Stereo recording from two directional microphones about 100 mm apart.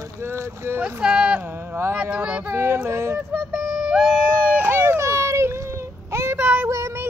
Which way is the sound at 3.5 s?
10° right (ahead or behind).